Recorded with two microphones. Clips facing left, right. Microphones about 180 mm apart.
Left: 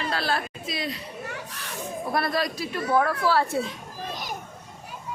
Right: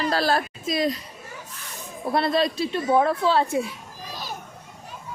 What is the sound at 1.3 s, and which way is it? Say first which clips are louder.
Children playing: left 4 dB; 80° left.